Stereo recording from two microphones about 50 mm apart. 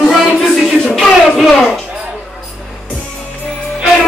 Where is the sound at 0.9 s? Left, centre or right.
Centre.